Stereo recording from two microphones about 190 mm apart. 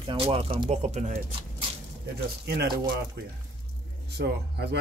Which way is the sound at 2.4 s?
55° right (ahead or behind).